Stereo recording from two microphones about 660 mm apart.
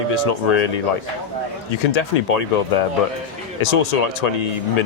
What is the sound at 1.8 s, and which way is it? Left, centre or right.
Speech, left.